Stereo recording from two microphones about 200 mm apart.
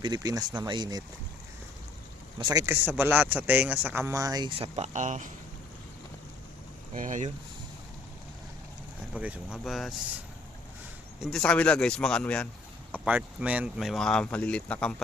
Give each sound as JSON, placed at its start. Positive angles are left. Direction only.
{"t": 0.0, "sound": "speech", "side_deg": -20}
{"t": 2.4, "sound": "speech", "side_deg": -20}
{"t": 2.8, "sound": "speech", "side_deg": -5}
{"t": 6.9, "sound": "speech", "side_deg": -40}
{"t": 9.1, "sound": "speech", "side_deg": -5}
{"t": 11.2, "sound": "speech", "side_deg": 5}
{"t": 12.9, "sound": "speech", "side_deg": -5}